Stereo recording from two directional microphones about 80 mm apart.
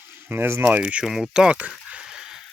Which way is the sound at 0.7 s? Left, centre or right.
Centre.